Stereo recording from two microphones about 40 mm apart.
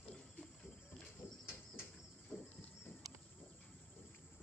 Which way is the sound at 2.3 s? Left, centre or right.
Left.